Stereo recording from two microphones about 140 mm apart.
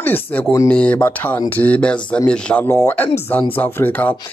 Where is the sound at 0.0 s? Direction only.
15° left (ahead or behind).